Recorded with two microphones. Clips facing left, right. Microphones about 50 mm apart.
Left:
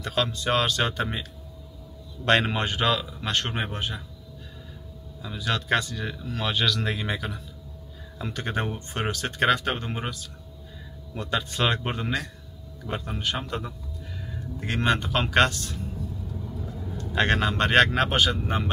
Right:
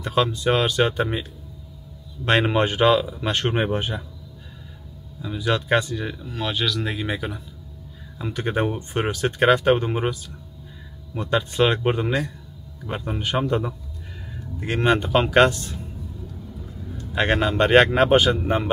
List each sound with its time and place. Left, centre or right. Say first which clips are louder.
0.0 s speech: right 5 dB; centre
2.2 s speech: right 3 dB; centre
5.2 s speech: right 5 dB; centre
11.1 s speech: right 6 dB; centre
17.1 s speech: right 3 dB; centre